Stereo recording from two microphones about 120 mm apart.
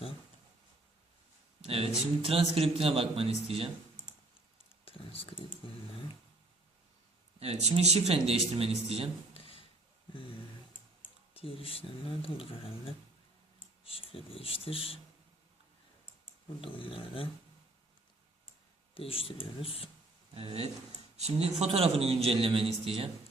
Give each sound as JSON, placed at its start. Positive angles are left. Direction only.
{"t": 1.6, "sound": "a man's voice", "side_deg": -55}
{"t": 4.9, "sound": "speech", "side_deg": 50}
{"t": 7.3, "sound": "a man's voice", "side_deg": -65}
{"t": 9.3, "sound": "a sound", "side_deg": 50}
{"t": 11.3, "sound": "speech", "side_deg": 50}
{"t": 16.6, "sound": "speech", "side_deg": 45}
{"t": 18.9, "sound": "speech", "side_deg": 50}
{"t": 20.3, "sound": "a man's voice", "side_deg": -55}